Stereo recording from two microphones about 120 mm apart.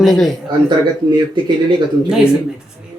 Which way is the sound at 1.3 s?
40° right (ahead or behind).